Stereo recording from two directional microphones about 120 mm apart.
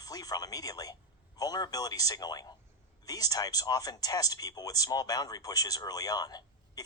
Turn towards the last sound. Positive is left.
turn(degrees=35)  # may be behind; listen again after turning